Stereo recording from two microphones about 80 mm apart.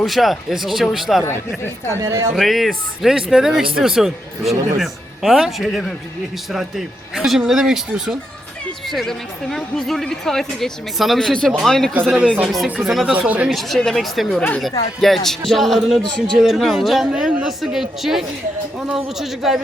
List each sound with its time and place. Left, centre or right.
0.0 s a woman's voice: centre
1.9 s a woman's voice: right
2.3 s a woman's voice: centre
12.6 s speech: centre
12.9 s a woman's voice: centre
13.1 s speech: centre
13.5 s a woman's voice: centre